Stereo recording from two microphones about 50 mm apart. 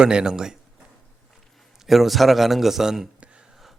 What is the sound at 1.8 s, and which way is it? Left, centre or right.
Speech, centre.